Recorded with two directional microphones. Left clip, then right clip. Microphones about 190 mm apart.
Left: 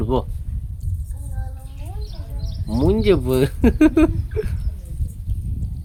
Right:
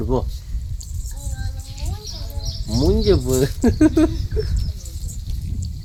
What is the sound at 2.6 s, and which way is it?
Bird, 15° left (ahead or behind).